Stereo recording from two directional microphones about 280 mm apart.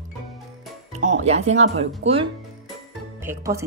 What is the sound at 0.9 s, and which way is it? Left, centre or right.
Speech, right.